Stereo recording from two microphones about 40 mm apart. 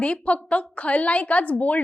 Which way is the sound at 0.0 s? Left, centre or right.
Left.